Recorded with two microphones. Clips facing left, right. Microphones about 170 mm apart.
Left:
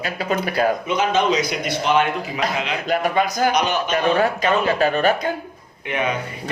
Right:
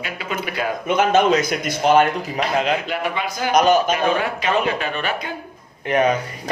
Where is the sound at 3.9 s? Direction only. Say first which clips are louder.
Left 2 dB; 40° left (ahead or behind).